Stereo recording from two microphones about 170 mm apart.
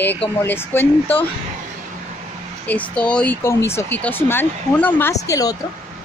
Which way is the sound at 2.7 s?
10° left (ahead or behind).